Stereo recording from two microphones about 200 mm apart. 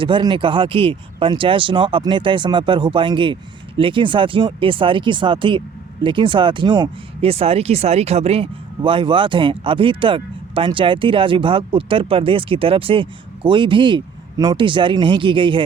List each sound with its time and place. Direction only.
0.0 s speech: 25° right (ahead or behind)